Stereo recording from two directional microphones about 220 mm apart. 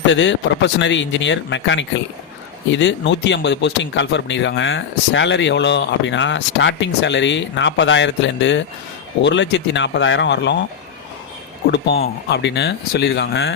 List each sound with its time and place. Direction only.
0.0 s speech: 55° left (ahead or behind)
12.3 s speech: 50° left (ahead or behind)